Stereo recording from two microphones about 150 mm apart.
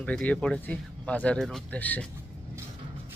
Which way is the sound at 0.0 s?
10° left (ahead or behind).